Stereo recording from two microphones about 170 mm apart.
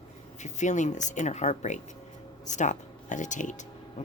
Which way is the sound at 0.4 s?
45° left (ahead or behind).